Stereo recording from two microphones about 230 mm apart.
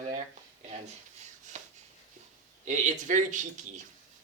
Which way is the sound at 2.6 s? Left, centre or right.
Right.